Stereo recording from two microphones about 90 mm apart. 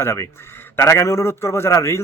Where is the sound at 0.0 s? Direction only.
30° left (ahead or behind).